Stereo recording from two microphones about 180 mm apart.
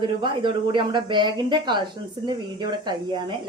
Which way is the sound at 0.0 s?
25° right (ahead or behind).